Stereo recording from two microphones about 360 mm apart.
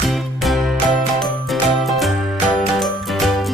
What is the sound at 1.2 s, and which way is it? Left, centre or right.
Jingle, centre.